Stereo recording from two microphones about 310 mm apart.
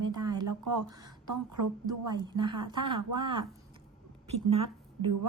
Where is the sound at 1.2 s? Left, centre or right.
Right.